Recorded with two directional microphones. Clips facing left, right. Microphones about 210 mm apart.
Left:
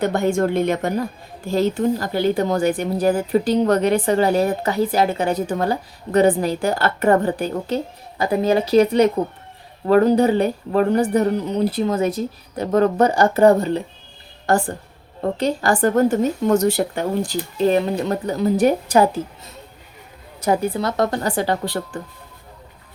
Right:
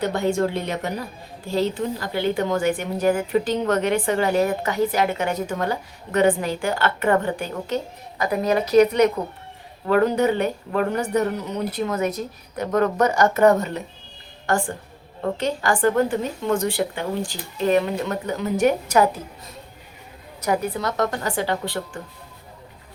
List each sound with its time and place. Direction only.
0.0 s a woman's voice: 50° left (ahead or behind); by 19.2 s 30° left (ahead or behind)
20.4 s speech: 30° left (ahead or behind)